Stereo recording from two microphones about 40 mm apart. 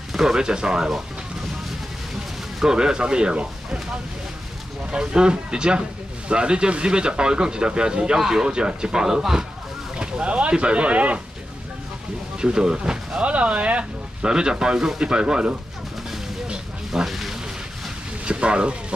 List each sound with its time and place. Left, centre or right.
0.3 s speech: centre
2.6 s speech: centre
4.9 s speech: right
8.5 s speech: right
9.9 s speech: right
12.4 s speech: right
13.2 s speech: right
14.2 s speech: right
16.4 s a sound: centre
17.0 s speech: centre
18.2 s speech: right